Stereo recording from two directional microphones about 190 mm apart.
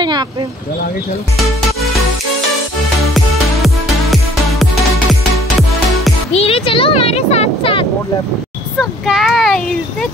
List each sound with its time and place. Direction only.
3.5 s music: centre (ahead or behind)
6.3 s speech: 30° left (ahead or behind)
8.7 s speech: centre (ahead or behind)